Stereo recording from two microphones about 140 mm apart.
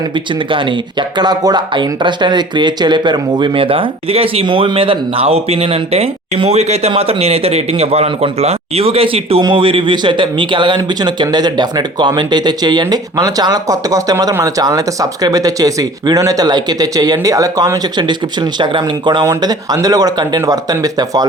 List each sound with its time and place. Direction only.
0.5 s a man's voice: 35° right (ahead or behind)